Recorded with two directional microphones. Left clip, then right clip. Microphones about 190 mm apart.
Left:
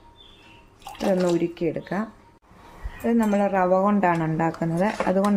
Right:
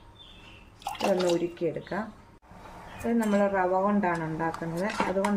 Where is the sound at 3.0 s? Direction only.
50° left (ahead or behind).